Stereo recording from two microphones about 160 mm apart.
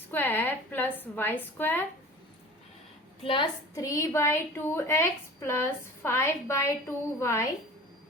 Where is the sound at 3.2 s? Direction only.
30° left (ahead or behind); by 7.5 s 15° left (ahead or behind).